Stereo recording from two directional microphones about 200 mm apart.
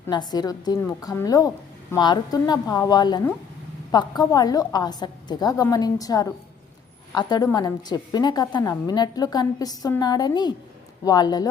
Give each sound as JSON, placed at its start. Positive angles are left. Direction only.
{"t": 0.1, "sound": "a woman's voice", "side_deg": 20}